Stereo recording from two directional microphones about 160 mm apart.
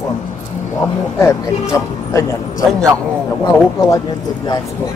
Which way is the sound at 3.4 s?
20° left (ahead or behind).